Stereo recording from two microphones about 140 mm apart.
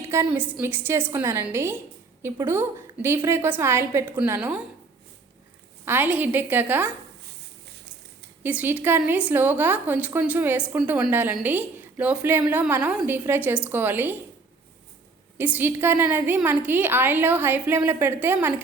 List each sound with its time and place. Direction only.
0.3 s a woman's voice: 5° right (ahead or behind)
5.8 s a woman's voice: 15° right (ahead or behind)
8.4 s a woman's voice: 10° right (ahead or behind)
15.4 s a woman's voice: 15° right (ahead or behind)